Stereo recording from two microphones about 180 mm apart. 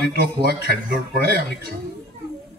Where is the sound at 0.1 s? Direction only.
60° right (ahead or behind).